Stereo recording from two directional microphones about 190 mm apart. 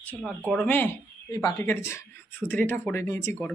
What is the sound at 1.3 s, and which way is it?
Speech, 15° left (ahead or behind).